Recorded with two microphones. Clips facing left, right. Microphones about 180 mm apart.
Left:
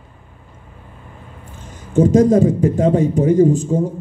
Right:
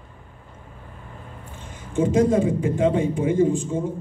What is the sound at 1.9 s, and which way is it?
Speech, 40° left (ahead or behind).